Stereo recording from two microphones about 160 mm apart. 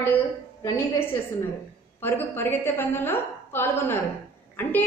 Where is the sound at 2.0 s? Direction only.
15° left (ahead or behind).